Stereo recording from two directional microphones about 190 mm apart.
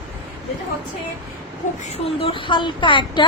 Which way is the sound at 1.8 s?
35° left (ahead or behind).